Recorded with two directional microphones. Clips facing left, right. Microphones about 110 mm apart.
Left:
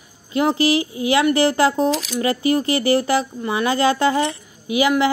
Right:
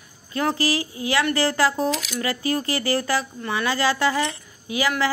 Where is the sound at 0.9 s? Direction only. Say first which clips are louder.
Left 6 dB; 20° left (ahead or behind).